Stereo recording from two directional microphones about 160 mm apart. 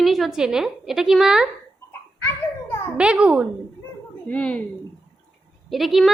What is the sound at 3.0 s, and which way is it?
Speech, 5° right (ahead or behind).